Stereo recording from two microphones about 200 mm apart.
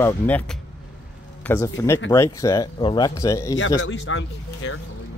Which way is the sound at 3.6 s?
70° left (ahead or behind).